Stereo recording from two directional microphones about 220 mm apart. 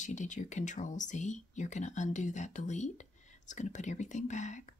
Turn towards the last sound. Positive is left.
turn(degrees=35)  # may be behind; listen again after turning